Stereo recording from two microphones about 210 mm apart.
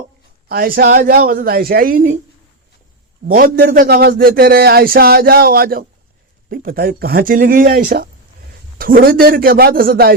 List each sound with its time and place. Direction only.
0.4 s speech: 45° right (ahead or behind)
3.2 s speech: 45° right (ahead or behind)